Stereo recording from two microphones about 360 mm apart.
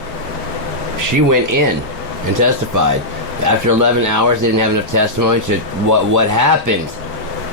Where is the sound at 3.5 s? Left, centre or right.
Right.